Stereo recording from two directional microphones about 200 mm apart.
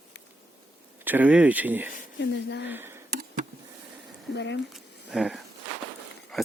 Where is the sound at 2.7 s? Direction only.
10° right (ahead or behind).